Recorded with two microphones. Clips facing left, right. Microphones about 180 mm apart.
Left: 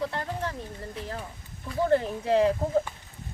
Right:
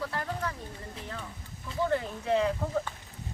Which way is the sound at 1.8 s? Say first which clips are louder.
Left 5 dB; 35° left (ahead or behind).